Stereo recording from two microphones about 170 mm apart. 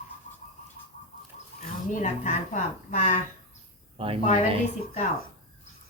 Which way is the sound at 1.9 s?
45° left (ahead or behind).